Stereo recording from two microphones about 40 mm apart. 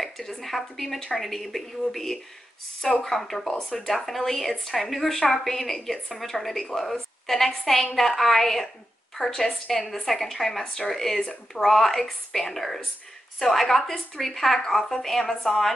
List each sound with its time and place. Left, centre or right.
0.0 s a woman's voice: centre
10.6 s speech: centre
10.9 s a woman's voice: centre
11.1 s a woman's voice: centre
11.6 s a woman's voice: centre